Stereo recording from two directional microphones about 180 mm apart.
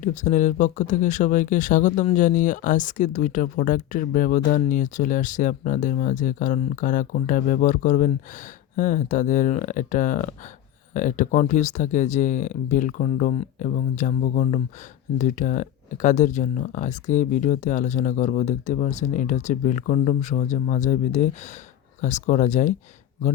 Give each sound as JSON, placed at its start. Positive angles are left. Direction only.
{"t": 0.0, "sound": "speech", "side_deg": 45}